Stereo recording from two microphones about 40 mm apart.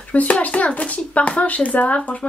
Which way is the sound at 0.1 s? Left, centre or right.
Left.